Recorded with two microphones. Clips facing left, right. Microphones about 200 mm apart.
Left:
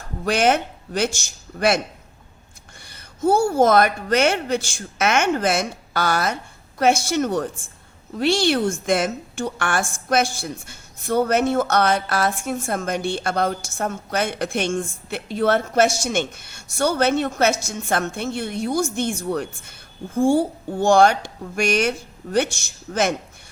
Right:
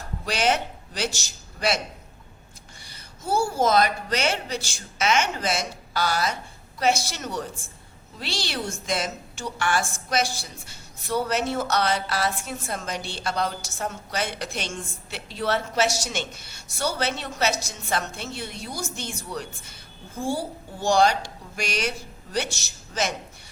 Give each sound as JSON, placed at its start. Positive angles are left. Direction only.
{"t": 0.3, "sound": "a woman's voice", "side_deg": 55}
{"t": 2.8, "sound": "a woman's voice", "side_deg": 55}